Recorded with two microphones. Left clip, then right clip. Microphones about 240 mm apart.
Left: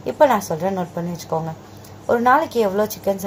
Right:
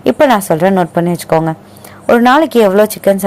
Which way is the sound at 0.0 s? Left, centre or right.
Right.